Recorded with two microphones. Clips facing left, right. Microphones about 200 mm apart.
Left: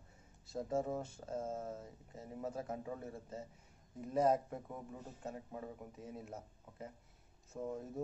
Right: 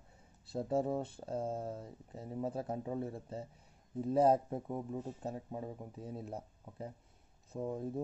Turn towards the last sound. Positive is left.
turn(degrees=-30)  # may be behind; listen again after turning